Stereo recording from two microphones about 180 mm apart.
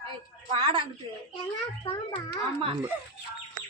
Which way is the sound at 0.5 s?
30° right (ahead or behind).